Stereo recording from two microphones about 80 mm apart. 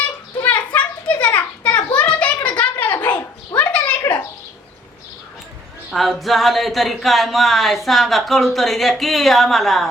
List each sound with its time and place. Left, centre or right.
0.4 s children playing: left
2.0 s a sound: centre
5.9 s speech: centre